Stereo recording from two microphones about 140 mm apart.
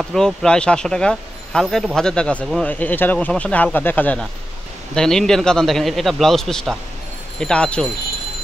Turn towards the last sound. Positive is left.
turn(degrees=10)  # may be behind; listen again after turning